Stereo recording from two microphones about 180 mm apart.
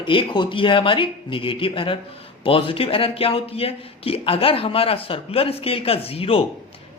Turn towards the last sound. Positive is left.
turn(degrees=30)  # may be behind; listen again after turning